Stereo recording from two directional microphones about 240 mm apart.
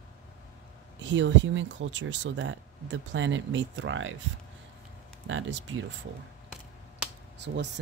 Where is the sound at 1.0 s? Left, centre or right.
Right.